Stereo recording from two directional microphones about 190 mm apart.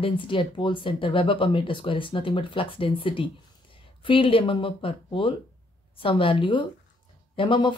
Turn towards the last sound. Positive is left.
turn(degrees=25)  # may be behind; listen again after turning